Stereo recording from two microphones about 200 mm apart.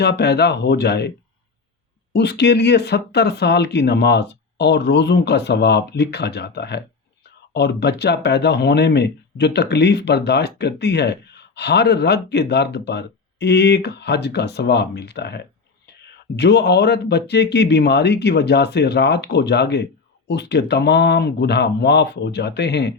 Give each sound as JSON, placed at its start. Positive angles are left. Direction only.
{"t": 0.0, "sound": "speech", "side_deg": 55}
{"t": 2.1, "sound": "speech", "side_deg": 55}